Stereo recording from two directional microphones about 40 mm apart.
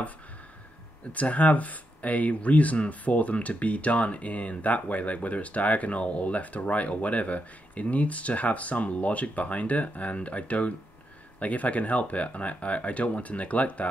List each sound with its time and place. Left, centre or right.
1.1 s speech: left